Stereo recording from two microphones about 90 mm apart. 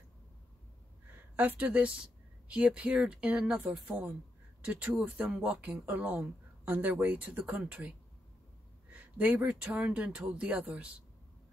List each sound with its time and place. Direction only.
1.3 s speech: 20° right (ahead or behind)
8.9 s speech: 20° right (ahead or behind)